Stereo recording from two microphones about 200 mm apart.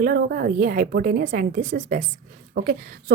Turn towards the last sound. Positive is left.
turn(degrees=-45)  # may be behind; listen again after turning